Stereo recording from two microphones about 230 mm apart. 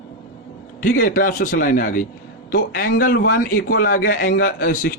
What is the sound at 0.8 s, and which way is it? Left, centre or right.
A man's voice, left.